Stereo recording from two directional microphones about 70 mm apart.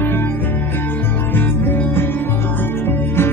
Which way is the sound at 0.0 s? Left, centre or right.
Left.